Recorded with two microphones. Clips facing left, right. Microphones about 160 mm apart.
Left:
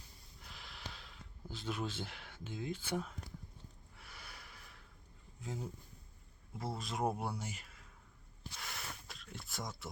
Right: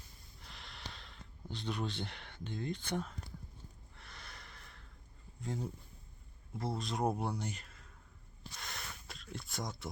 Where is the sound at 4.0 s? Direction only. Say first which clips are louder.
Right 1 dB; 10° left (ahead or behind).